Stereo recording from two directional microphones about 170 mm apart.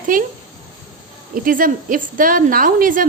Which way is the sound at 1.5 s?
55° right (ahead or behind).